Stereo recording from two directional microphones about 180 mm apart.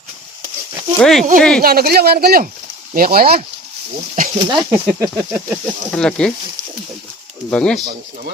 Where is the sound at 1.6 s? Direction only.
55° right (ahead or behind).